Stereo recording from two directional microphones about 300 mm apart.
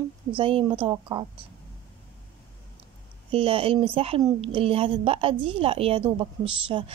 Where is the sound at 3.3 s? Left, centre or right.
Centre.